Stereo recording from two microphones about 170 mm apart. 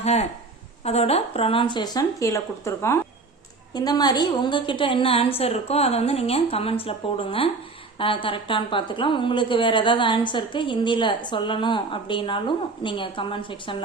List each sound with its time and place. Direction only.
0.0 s a woman's voice: 40° left (ahead or behind)